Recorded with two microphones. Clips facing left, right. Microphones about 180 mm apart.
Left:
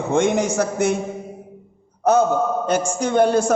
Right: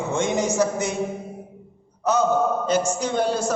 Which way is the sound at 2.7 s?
55° left (ahead or behind).